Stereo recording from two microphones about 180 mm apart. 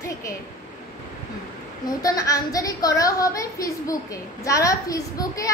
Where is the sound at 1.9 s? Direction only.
20° left (ahead or behind).